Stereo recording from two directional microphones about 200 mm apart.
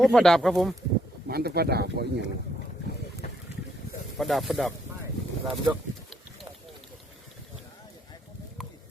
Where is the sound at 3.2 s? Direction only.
40° left (ahead or behind).